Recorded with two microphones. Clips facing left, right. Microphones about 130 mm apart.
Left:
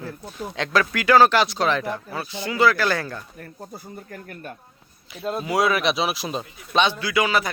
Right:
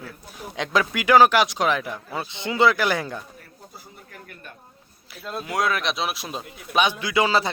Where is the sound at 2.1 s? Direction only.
20° right (ahead or behind).